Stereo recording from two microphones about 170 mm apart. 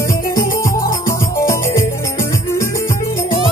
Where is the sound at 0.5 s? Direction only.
20° left (ahead or behind).